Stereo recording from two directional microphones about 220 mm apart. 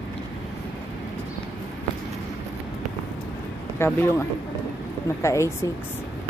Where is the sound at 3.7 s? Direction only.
10° left (ahead or behind).